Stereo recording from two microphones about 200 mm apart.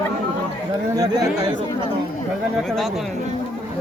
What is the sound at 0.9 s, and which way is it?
Speech, 20° right (ahead or behind).